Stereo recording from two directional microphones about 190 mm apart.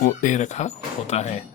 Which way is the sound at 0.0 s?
45° left (ahead or behind).